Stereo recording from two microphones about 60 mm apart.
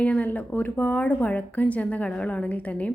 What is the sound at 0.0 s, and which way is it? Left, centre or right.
Speech, left.